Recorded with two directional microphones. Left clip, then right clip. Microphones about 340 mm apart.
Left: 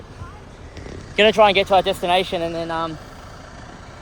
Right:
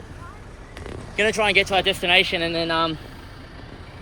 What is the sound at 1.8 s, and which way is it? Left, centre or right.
Speech, left.